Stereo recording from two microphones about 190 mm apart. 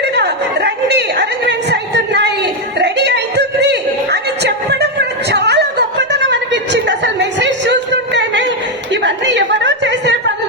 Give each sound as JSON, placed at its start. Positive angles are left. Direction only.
{"t": 0.0, "sound": "chatter", "side_deg": -60}